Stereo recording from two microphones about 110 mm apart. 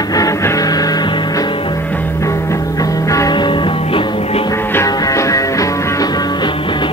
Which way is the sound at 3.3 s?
45° left (ahead or behind).